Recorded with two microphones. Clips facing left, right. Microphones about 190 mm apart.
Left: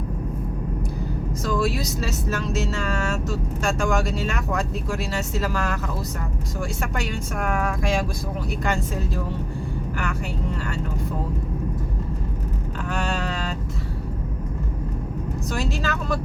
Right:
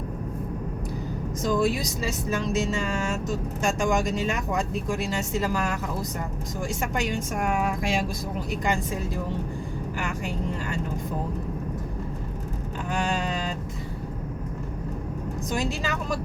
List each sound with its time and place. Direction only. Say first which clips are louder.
1.5 s speech: right 1 dB; 20° right (ahead or behind)
12.9 s vehicle: even; 15° right (ahead or behind)
15.5 s speech: left 1 dB; 15° right (ahead or behind)